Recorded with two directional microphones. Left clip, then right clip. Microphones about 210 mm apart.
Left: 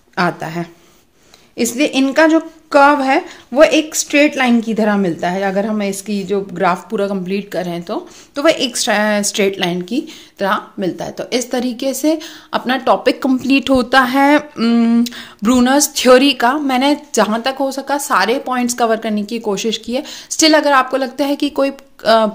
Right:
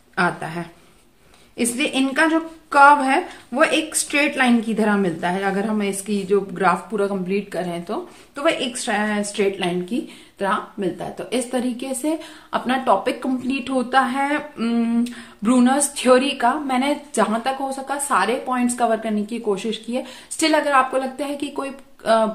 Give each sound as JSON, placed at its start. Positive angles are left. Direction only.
{"t": 0.1, "sound": "a woman's voice", "side_deg": 40}